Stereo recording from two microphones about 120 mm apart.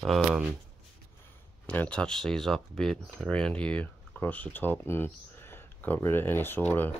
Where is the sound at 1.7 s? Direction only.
10° left (ahead or behind).